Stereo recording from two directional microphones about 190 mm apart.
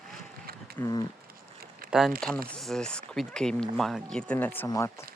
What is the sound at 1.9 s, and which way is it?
Speech, centre (ahead or behind).